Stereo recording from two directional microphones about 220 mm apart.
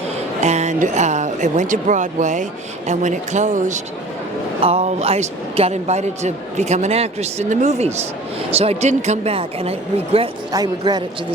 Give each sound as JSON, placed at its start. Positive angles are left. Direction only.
{"t": 0.4, "sound": "a man's voice", "side_deg": -30}